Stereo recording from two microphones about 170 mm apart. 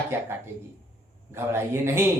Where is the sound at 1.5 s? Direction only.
15° right (ahead or behind).